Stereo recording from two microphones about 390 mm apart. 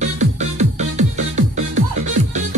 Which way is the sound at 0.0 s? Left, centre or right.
Centre.